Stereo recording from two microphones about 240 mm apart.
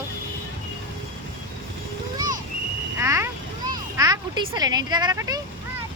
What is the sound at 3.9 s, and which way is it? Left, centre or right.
Speech, centre.